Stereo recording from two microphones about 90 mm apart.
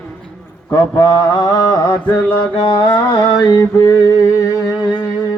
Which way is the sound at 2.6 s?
50° left (ahead or behind).